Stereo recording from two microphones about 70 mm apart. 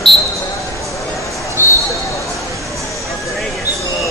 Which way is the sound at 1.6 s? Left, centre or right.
Right.